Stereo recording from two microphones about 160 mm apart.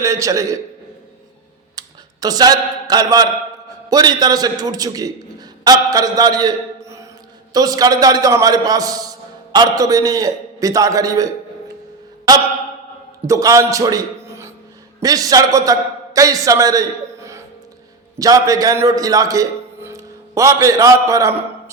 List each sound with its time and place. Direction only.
0.0 s a man's voice: 20° right (ahead or behind)
1.8 s tick: 25° right (ahead or behind)
2.2 s a man's voice: 25° right (ahead or behind)
13.2 s a man's voice: 20° right (ahead or behind)